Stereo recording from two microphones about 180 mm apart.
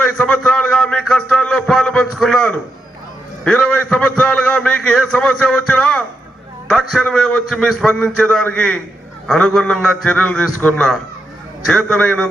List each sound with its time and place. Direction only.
0.0 s a man's voice: 5° left (ahead or behind)